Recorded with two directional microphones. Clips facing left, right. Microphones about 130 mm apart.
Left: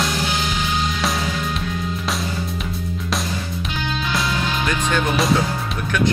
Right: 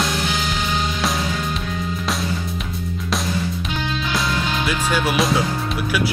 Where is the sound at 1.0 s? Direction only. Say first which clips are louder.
Even; centre (ahead or behind).